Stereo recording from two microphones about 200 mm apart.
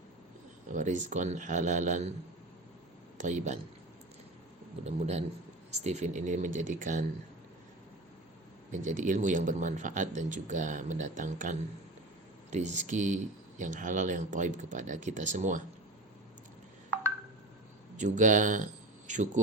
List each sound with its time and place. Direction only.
0.7 s speech: 40° right (ahead or behind)
3.2 s speech: 35° right (ahead or behind)
4.8 s speech: 35° right (ahead or behind)
8.8 s speech: 40° right (ahead or behind)
17.9 s speech: 40° right (ahead or behind)